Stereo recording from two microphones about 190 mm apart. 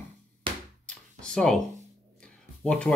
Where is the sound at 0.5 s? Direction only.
25° right (ahead or behind).